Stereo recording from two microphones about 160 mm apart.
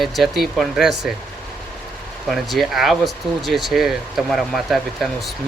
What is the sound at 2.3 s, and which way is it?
Speech, centre (ahead or behind).